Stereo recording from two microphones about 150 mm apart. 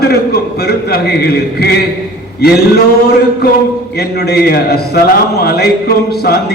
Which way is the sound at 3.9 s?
90° left.